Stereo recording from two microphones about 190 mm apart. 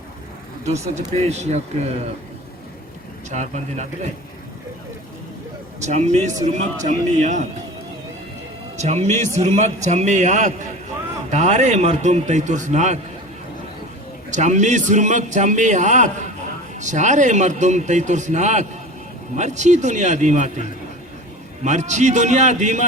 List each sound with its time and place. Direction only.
1.1 s a man's voice: 35° right (ahead or behind)
3.2 s a man's voice: 40° right (ahead or behind)
5.8 s a man's voice: 35° right (ahead or behind)
8.8 s a man's voice: 35° right (ahead or behind)
14.3 s a man's voice: 40° right (ahead or behind)